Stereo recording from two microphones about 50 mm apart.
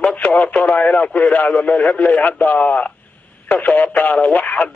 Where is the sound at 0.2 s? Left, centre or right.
Left.